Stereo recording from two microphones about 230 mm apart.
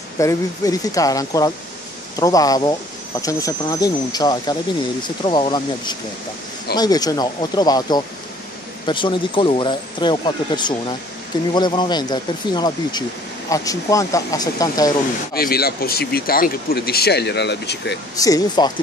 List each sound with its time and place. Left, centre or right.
0.2 s speech: centre
15.3 s speech: left
18.1 s speech: centre